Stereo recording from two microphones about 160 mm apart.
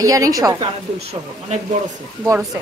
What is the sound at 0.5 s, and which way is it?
Speech, 40° right (ahead or behind).